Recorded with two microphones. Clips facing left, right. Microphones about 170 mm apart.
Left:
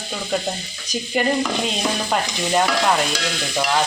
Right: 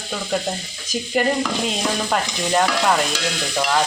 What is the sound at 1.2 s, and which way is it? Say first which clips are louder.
Frying: right 1 dB; 5° left (ahead or behind).